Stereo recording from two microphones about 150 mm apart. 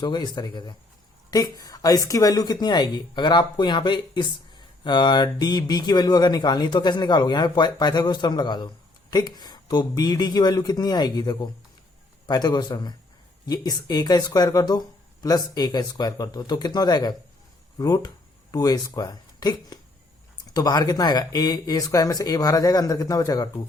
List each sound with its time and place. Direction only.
0.0 s speech: 30° left (ahead or behind)